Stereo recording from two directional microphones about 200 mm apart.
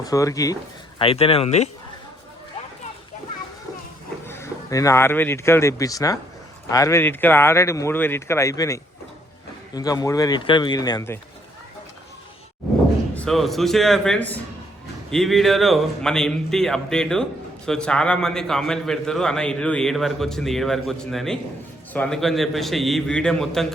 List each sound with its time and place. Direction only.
0.0 s speech: 15° left (ahead or behind)
0.9 s a man's voice: 30° left (ahead or behind)
4.3 s a man's voice: 15° left (ahead or behind)
13.1 s a man's voice: centre (ahead or behind)